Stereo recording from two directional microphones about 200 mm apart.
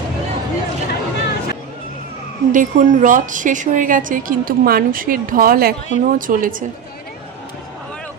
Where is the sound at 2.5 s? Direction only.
40° right (ahead or behind).